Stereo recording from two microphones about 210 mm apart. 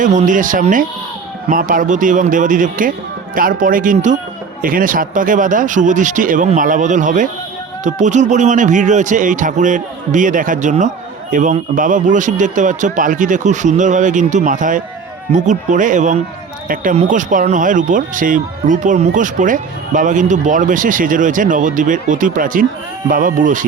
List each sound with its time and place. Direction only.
0.0 s speech: 35° right (ahead or behind)